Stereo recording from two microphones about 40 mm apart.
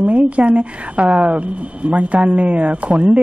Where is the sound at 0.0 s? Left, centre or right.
Right.